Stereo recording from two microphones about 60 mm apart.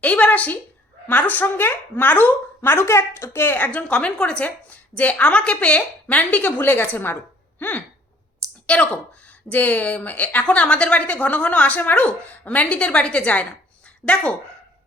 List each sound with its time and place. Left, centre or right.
0.0 s a woman's voice: left
3.7 s a woman's voice: left
8.6 s a woman's voice: centre